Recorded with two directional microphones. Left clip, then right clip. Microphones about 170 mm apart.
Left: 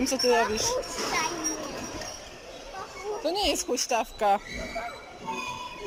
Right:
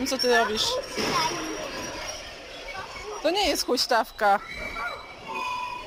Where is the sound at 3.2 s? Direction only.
10° left (ahead or behind).